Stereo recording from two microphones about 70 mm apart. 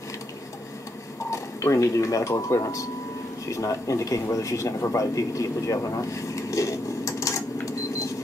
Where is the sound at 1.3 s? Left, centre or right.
Left.